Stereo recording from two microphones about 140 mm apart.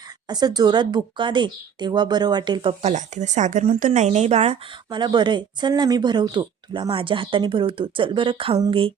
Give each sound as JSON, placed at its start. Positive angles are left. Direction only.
{"t": 0.3, "sound": "speech", "side_deg": -30}
{"t": 2.8, "sound": "speech", "side_deg": -60}
{"t": 4.9, "sound": "speech", "side_deg": -35}